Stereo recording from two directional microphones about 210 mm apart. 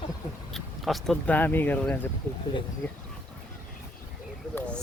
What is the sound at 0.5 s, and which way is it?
Speech, centre (ahead or behind).